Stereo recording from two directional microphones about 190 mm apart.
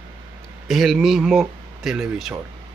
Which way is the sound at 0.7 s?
Centre (ahead or behind).